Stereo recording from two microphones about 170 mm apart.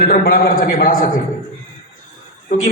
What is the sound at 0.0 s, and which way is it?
A man's voice, 60° left (ahead or behind).